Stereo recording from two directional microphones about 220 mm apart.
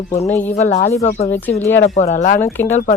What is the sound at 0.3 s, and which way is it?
Speech, 30° left (ahead or behind).